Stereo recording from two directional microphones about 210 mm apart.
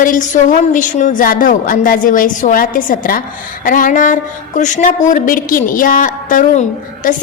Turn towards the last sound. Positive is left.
turn(degrees=35)  # may be behind; listen again after turning